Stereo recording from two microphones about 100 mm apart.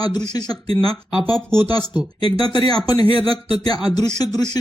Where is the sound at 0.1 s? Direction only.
40° left (ahead or behind).